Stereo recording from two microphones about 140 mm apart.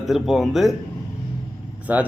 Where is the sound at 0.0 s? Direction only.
Centre (ahead or behind).